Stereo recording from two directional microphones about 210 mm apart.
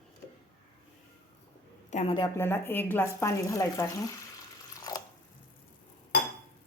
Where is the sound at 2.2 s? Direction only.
10° left (ahead or behind).